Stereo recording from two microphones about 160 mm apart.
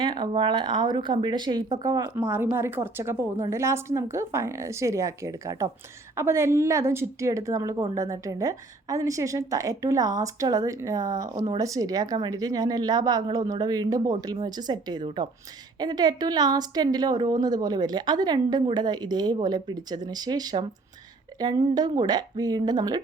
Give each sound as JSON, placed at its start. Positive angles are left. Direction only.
{"t": 0.0, "sound": "a woman's voice", "side_deg": -30}